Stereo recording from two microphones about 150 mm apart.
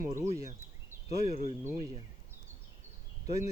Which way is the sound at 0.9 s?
15° right (ahead or behind).